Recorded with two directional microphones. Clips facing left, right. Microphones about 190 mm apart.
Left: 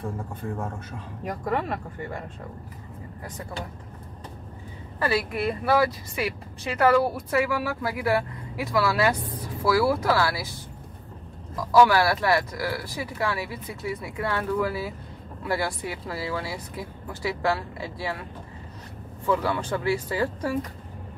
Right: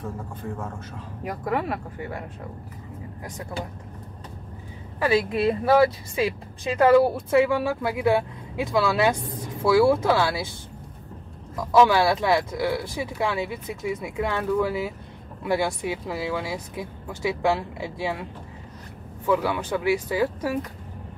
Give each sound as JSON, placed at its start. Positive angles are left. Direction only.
{"t": 1.2, "sound": "speech", "side_deg": -5}
{"t": 4.9, "sound": "speech", "side_deg": -15}
{"t": 11.7, "sound": "speech", "side_deg": -20}
{"t": 19.2, "sound": "speech", "side_deg": -15}